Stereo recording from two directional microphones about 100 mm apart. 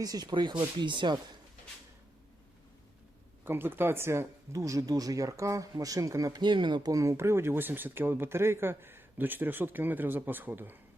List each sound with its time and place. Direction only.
0.0 s speech: 40° right (ahead or behind)
3.4 s speech: 20° right (ahead or behind)